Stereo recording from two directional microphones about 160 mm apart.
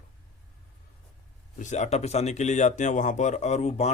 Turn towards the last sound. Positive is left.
turn(degrees=45)  # may be behind; listen again after turning